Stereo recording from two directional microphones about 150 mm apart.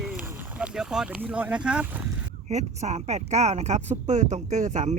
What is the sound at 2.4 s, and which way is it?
Speech, 50° right (ahead or behind).